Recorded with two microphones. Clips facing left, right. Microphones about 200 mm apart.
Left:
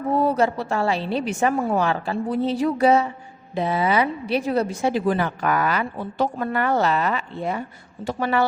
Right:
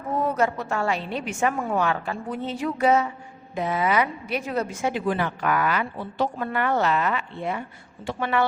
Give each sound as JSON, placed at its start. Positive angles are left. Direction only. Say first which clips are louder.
{"t": 0.1, "sound": "a woman's voice", "louder": "left 3 dB", "side_deg": 35}